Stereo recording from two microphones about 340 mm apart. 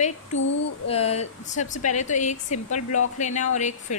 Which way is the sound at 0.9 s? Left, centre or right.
Centre.